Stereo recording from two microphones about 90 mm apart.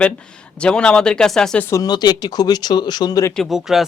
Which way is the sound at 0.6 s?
10° left (ahead or behind).